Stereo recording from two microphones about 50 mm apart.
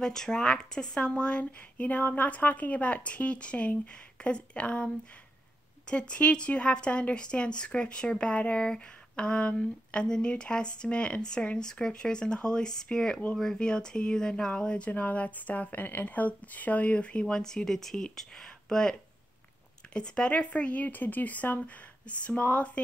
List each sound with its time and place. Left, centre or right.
0.0 s speech: centre; by 22.7 s left